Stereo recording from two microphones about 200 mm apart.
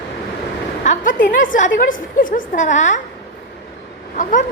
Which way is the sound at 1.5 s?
40° left (ahead or behind).